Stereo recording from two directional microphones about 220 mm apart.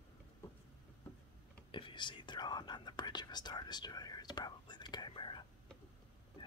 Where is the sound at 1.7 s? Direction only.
20° left (ahead or behind).